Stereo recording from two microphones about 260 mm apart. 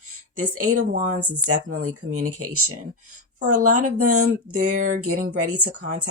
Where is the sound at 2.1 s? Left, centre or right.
Right.